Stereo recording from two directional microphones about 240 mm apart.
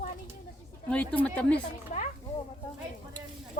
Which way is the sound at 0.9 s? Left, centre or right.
Centre.